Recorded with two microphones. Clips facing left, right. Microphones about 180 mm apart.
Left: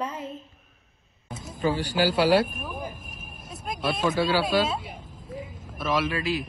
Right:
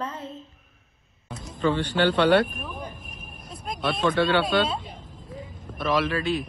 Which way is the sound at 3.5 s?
5° left (ahead or behind).